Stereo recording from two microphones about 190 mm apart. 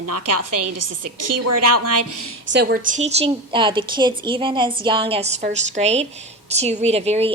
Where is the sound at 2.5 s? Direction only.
60° right (ahead or behind).